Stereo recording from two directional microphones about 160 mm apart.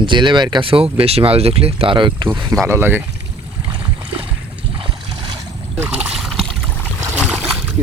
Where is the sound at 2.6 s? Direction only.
15° right (ahead or behind).